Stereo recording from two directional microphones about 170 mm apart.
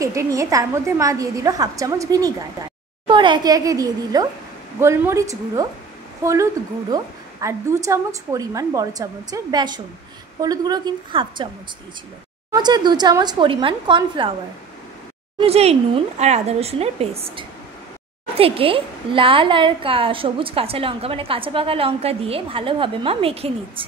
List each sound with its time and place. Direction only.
0.0 s a woman's voice: 20° right (ahead or behind)
12.5 s a woman's voice: 25° right (ahead or behind)
15.3 s a woman's voice: 35° right (ahead or behind)